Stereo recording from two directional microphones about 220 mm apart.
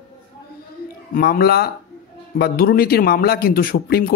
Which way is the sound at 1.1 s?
45° left (ahead or behind).